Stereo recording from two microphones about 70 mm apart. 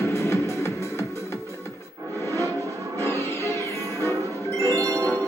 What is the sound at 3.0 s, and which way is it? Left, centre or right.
Music, left.